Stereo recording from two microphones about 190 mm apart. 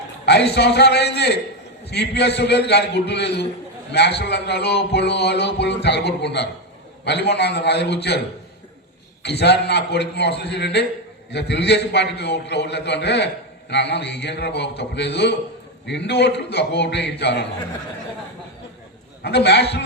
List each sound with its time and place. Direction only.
0.3 s a man's voice: 60° left (ahead or behind)
9.2 s a man's voice: 60° left (ahead or behind)
19.2 s a man's voice: 60° left (ahead or behind)